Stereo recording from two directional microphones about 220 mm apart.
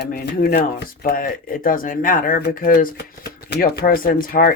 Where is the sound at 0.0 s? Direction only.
45° left (ahead or behind).